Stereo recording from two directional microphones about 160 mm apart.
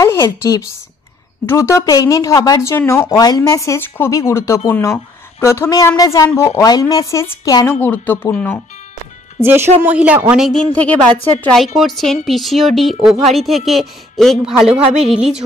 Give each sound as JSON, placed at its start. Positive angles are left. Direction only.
{"t": 0.0, "sound": "a woman's voice", "side_deg": 15}
{"t": 9.4, "sound": "speech", "side_deg": -15}
{"t": 10.7, "sound": "a woman's voice", "side_deg": 10}